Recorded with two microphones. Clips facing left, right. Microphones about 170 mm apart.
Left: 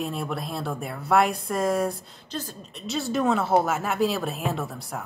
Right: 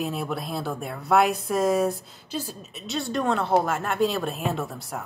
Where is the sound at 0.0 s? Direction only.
Centre (ahead or behind).